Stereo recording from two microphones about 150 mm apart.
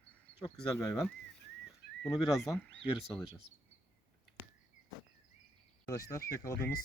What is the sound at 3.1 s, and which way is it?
Speech, centre (ahead or behind).